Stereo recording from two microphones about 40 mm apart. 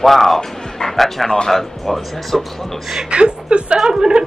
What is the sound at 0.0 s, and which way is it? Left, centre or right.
Speech, centre.